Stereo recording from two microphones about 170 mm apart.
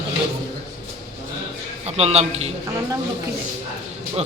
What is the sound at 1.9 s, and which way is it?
Speech, 40° right (ahead or behind).